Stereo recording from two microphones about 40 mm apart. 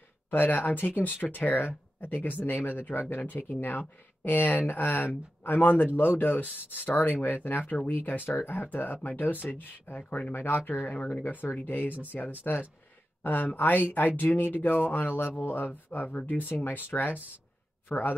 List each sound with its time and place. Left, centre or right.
0.3 s speech: left
10.3 s speech: left
10.9 s a man's voice: left